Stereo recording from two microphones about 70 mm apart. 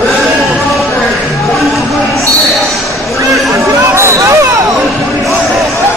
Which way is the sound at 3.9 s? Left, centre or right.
Right.